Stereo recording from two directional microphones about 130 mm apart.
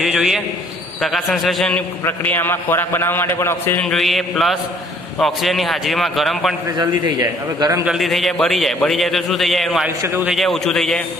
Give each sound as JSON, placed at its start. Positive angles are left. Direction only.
{"t": 0.0, "sound": "a man's voice", "side_deg": -5}
{"t": 2.0, "sound": "a man's voice", "side_deg": 15}
{"t": 3.8, "sound": "a man's voice", "side_deg": 0}
{"t": 6.8, "sound": "a man's voice", "side_deg": -30}
{"t": 7.8, "sound": "a man's voice", "side_deg": -5}